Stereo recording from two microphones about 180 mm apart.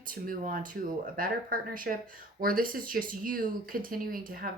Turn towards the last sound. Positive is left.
turn(degrees=-55)  # may be behind; listen again after turning